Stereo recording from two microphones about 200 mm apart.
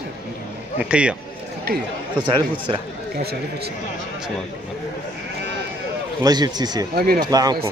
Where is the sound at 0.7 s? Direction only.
5° right (ahead or behind).